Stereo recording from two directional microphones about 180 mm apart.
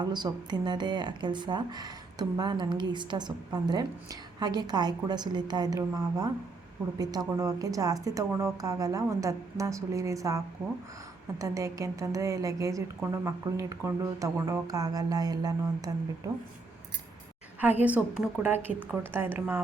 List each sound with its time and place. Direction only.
0.0 s a woman's voice: 25° right (ahead or behind)
17.6 s a woman's voice: 10° right (ahead or behind)